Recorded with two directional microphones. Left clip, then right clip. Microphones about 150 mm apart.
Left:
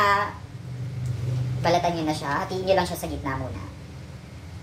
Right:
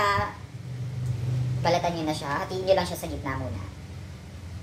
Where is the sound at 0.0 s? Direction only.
Centre (ahead or behind).